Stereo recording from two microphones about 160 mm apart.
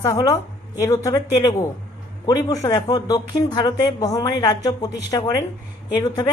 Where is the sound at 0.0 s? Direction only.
20° left (ahead or behind).